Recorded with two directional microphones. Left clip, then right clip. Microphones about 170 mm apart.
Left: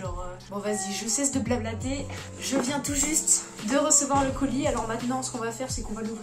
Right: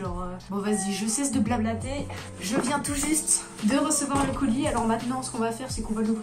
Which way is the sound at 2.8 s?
10° left (ahead or behind).